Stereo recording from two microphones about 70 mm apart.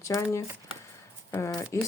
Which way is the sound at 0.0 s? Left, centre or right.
Left.